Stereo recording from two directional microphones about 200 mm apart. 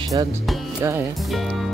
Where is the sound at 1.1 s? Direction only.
Centre (ahead or behind).